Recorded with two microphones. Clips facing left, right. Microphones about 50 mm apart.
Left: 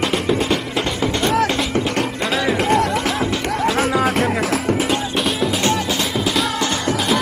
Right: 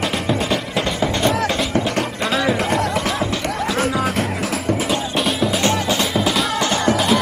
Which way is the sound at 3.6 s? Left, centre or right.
Left.